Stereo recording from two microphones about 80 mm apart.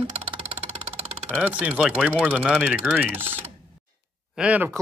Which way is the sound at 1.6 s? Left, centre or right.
Centre.